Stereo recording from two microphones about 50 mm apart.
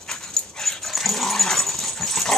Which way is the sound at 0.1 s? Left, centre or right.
Centre.